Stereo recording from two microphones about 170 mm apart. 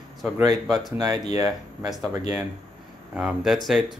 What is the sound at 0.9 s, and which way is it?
Speech, 25° right (ahead or behind).